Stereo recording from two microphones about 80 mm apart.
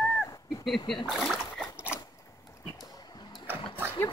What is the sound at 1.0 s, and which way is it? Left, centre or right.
Speech, centre.